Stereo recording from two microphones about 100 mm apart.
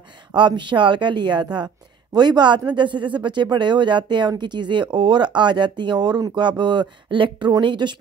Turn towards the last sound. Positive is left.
turn(degrees=-50)  # may be behind; listen again after turning